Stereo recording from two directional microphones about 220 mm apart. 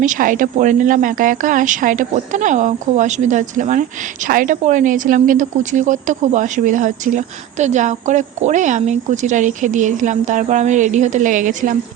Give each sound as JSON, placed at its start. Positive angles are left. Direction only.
{"t": 0.0, "sound": "speech", "side_deg": -35}